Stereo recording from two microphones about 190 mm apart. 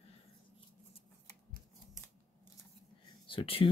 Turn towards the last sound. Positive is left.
turn(degrees=30)  # may be behind; listen again after turning